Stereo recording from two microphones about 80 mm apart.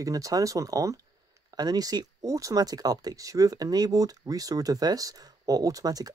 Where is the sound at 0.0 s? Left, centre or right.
Right.